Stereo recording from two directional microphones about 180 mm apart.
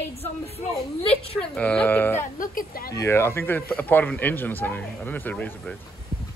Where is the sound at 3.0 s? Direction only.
15° left (ahead or behind).